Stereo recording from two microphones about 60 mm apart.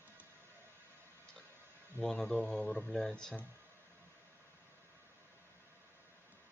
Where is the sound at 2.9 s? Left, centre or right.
Centre.